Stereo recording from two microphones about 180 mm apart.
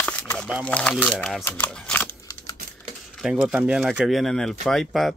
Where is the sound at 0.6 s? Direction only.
5° left (ahead or behind).